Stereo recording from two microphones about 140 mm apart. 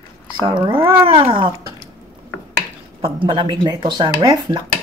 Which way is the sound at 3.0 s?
35° right (ahead or behind).